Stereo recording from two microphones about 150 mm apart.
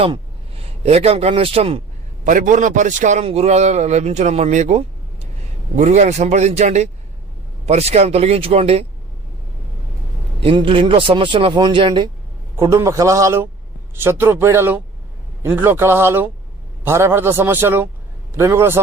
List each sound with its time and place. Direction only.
0.0 s a man's voice: 40° right (ahead or behind)
2.2 s a man's voice: 60° right (ahead or behind); by 8.9 s 40° right (ahead or behind)
10.4 s a man's voice: 35° right (ahead or behind)
12.5 s a man's voice: 20° right (ahead or behind)